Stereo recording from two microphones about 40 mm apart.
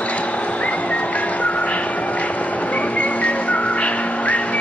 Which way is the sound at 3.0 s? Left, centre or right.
Left.